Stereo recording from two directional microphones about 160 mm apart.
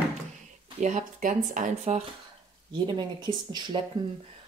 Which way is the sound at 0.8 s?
50° right (ahead or behind).